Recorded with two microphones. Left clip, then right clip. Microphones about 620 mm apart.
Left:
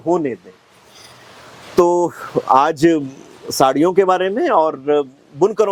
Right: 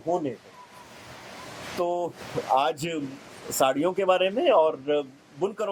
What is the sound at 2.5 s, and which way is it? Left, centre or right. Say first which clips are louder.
Speech: left 12 dB; left.